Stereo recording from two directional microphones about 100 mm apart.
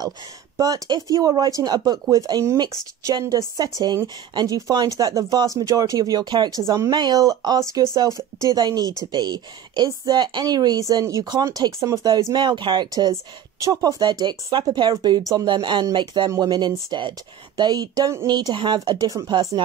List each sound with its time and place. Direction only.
0.6 s speech: 40° right (ahead or behind)
12.4 s speech: 50° right (ahead or behind)
19.0 s speech: 35° right (ahead or behind)